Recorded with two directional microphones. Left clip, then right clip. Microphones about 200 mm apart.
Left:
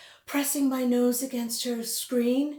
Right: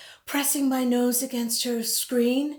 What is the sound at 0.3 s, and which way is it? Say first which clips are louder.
Speech: right 2 dB; 40° right (ahead or behind).